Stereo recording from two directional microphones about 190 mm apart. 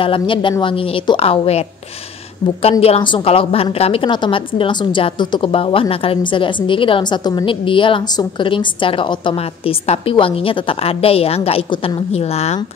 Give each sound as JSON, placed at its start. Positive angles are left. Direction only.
{"t": 0.0, "sound": "a woman's voice", "side_deg": 25}
{"t": 2.8, "sound": "a woman's voice", "side_deg": 30}